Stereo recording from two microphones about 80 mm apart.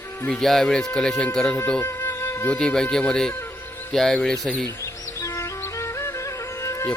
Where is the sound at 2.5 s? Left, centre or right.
Centre.